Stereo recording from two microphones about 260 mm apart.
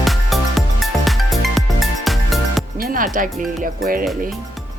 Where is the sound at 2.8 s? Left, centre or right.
Right.